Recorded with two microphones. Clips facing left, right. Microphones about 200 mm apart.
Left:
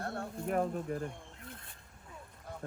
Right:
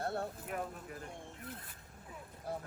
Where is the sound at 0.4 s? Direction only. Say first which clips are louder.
Left 9 dB; 45° left (ahead or behind).